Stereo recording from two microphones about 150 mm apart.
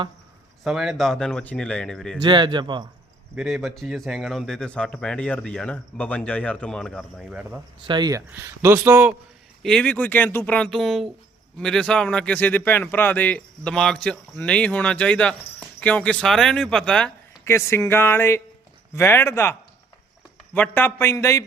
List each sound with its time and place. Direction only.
0.6 s speech: 5° right (ahead or behind)
2.2 s speech: 30° right (ahead or behind)
3.3 s speech: centre (ahead or behind)
7.9 s speech: 30° right (ahead or behind)
8.3 s speech: 15° right (ahead or behind)
9.6 s speech: 5° left (ahead or behind)
17.4 s speech: 20° left (ahead or behind)